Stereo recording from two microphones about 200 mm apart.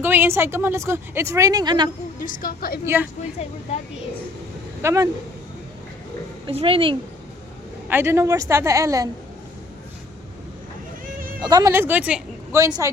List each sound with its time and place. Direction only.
0.0 s speech: 10° right (ahead or behind)
2.2 s a woman's voice: 45° left (ahead or behind)
2.8 s speech: 10° right (ahead or behind)
4.8 s speech: 15° right (ahead or behind)
6.4 s speech: 30° right (ahead or behind)
7.9 s speech: 10° right (ahead or behind)
11.4 s speech: 20° right (ahead or behind)